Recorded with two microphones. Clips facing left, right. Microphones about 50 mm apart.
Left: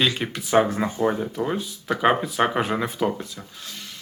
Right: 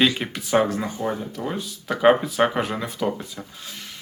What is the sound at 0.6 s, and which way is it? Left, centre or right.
Speech, left.